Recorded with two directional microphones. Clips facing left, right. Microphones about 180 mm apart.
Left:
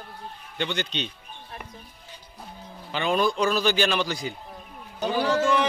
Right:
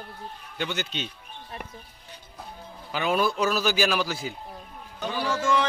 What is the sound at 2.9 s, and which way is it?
A man's voice, 5° right (ahead or behind).